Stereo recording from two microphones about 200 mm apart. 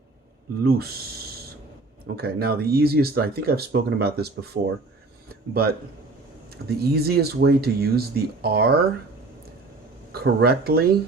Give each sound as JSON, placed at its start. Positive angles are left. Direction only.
{"t": 0.6, "sound": "speech", "side_deg": -50}
{"t": 2.1, "sound": "speech", "side_deg": -50}
{"t": 10.1, "sound": "speech", "side_deg": -50}